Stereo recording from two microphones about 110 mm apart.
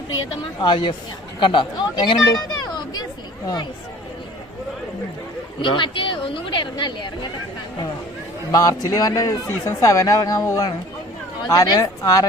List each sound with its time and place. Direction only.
0.6 s speech: 45° left (ahead or behind)
1.4 s a sound: 45° left (ahead or behind)
5.6 s speech: 50° left (ahead or behind)
8.5 s speech: 35° left (ahead or behind)